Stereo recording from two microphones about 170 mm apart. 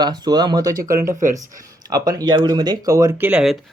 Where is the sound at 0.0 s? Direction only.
25° right (ahead or behind).